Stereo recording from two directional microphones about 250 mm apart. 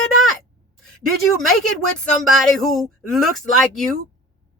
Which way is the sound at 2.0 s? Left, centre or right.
Centre.